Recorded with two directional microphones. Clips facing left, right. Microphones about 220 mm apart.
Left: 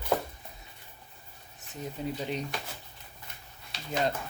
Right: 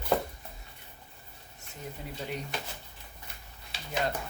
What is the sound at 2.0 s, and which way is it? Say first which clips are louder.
Speech: left 13 dB; 20° left (ahead or behind).